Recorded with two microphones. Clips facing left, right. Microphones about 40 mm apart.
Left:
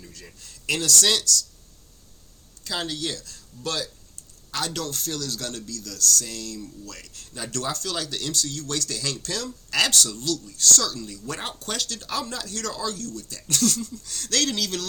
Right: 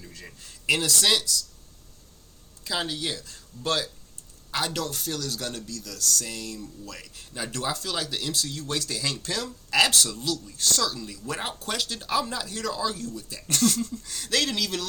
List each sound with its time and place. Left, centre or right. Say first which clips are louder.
0.1 s speech: right 1 dB; right
2.6 s speech: even; centre; by 3.8 s right
4.7 s speech: even; centre
13.5 s speech: right 1 dB; right
14.2 s speech: left 1 dB; centre